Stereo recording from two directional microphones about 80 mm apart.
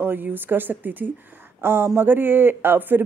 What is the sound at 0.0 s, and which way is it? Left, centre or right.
Speech, right.